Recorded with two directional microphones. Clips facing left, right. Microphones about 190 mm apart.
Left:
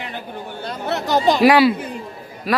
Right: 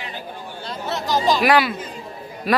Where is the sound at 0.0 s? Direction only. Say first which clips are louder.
Left 3 dB; 55° left (ahead or behind).